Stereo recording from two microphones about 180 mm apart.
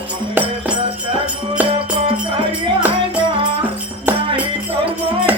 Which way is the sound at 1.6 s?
30° right (ahead or behind).